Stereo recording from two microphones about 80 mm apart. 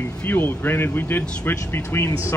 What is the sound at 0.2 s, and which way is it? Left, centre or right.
A man's voice, left.